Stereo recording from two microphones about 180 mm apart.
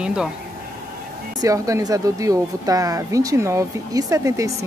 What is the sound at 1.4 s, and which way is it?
Speech, 20° right (ahead or behind).